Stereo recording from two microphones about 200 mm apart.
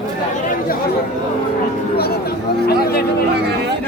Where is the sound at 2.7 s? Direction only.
50° left (ahead or behind).